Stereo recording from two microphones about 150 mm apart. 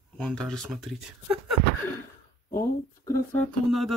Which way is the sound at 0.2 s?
5° left (ahead or behind).